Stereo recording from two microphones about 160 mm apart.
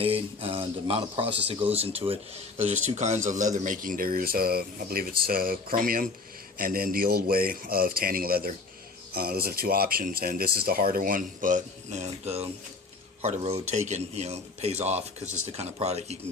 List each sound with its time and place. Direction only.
0.0 s a man's voice: 35° right (ahead or behind)